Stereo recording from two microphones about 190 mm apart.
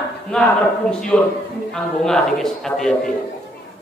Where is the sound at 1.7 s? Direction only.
5° left (ahead or behind).